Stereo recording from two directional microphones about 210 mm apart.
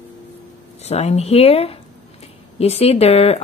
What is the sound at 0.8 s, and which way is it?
Speech, 30° left (ahead or behind).